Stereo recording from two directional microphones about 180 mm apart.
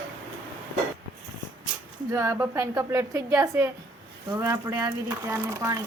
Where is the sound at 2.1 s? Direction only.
15° right (ahead or behind).